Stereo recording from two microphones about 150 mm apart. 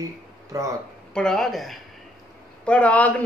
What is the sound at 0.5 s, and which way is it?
Speech, 20° right (ahead or behind).